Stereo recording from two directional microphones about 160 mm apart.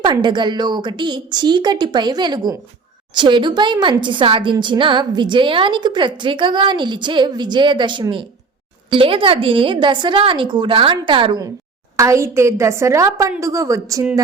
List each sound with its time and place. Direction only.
0.0 s a woman's voice: 30° right (ahead or behind)